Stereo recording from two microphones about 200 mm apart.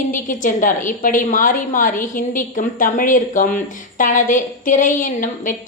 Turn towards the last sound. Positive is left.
turn(degrees=40)  # may be behind; listen again after turning